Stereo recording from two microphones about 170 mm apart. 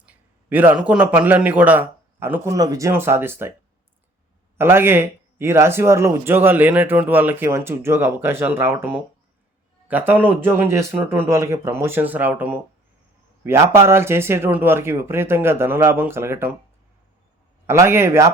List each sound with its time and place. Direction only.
0.5 s speech: 10° right (ahead or behind)
4.5 s speech: 15° right (ahead or behind)
17.7 s speech: 15° right (ahead or behind)